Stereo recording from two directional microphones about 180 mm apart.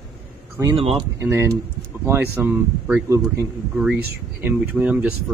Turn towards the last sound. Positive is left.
turn(degrees=-10)  # may be behind; listen again after turning